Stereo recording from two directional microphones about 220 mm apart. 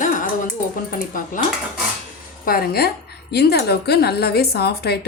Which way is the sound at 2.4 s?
40° left (ahead or behind).